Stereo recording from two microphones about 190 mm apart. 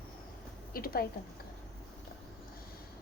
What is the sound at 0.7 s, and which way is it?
Speech, 50° left (ahead or behind).